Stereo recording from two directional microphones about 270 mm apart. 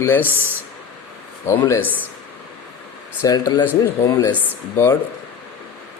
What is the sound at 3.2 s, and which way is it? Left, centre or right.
Speech, centre.